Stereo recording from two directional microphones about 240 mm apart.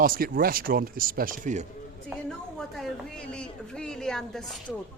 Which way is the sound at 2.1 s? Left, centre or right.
Centre.